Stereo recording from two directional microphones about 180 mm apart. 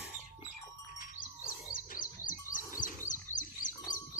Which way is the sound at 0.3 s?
30° left (ahead or behind).